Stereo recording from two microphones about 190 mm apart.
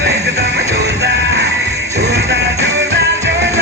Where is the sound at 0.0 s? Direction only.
60° right (ahead or behind).